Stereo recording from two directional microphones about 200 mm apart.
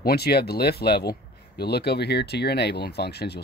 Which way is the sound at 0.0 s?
50° left (ahead or behind).